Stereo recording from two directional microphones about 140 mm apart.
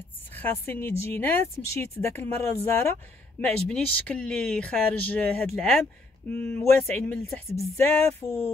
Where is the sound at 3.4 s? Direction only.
5° left (ahead or behind).